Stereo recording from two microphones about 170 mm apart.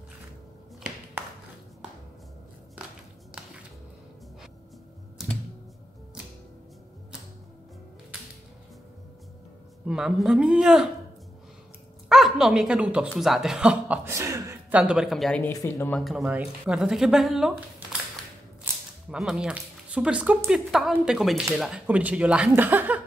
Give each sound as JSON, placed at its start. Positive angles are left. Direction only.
{"t": 1.2, "sound": "tap", "side_deg": -15}
{"t": 9.8, "sound": "a woman's voice", "side_deg": -5}
{"t": 12.1, "sound": "a woman's voice", "side_deg": 0}
{"t": 14.0, "sound": "speech", "side_deg": -15}
{"t": 15.5, "sound": "speech", "side_deg": 20}
{"t": 15.9, "sound": "a woman's voice", "side_deg": 0}
{"t": 18.7, "sound": "whip", "side_deg": -15}
{"t": 19.0, "sound": "a woman's voice", "side_deg": -5}